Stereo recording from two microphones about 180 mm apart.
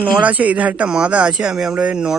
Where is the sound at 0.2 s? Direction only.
10° right (ahead or behind).